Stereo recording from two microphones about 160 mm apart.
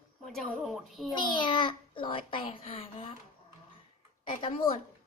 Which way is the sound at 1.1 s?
30° left (ahead or behind).